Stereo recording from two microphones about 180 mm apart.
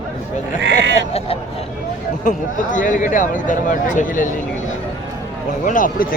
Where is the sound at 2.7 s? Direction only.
45° left (ahead or behind).